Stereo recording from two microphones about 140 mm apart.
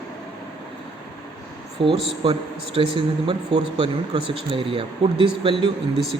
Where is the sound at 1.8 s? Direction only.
40° right (ahead or behind).